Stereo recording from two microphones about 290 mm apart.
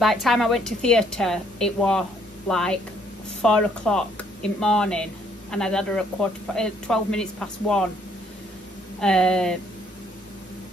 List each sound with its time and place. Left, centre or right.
0.0 s a woman's voice: centre
9.0 s a woman's voice: centre